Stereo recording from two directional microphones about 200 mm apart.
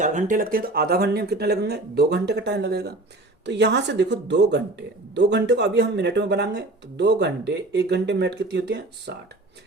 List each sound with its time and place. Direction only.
0.0 s speech: 35° right (ahead or behind); by 9.1 s 60° right (ahead or behind)